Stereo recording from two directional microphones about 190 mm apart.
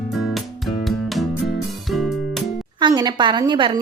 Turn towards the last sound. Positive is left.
turn(degrees=-25)  # may be behind; listen again after turning